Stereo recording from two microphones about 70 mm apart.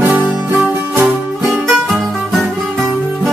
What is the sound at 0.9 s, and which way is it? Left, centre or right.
Music, right.